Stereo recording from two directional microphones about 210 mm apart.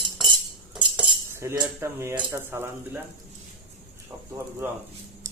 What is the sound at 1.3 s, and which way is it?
Speech, 15° right (ahead or behind).